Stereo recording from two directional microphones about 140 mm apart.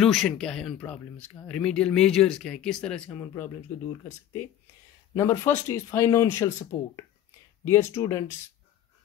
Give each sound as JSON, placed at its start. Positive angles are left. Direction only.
{"t": 0.0, "sound": "speech", "side_deg": 0}
{"t": 5.1, "sound": "speech", "side_deg": 20}